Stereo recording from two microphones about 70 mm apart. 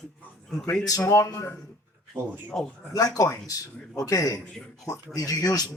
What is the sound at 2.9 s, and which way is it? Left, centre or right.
Speech, left.